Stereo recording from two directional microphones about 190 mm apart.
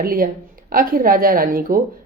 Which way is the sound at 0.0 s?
50° right (ahead or behind).